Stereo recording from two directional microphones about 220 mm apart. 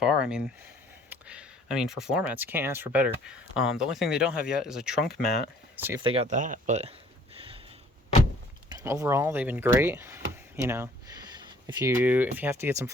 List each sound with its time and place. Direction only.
0.0 s speech: 5° right (ahead or behind)
6.0 s speech: 25° right (ahead or behind)
7.3 s a sound: 25° right (ahead or behind)
8.7 s speech: 15° right (ahead or behind)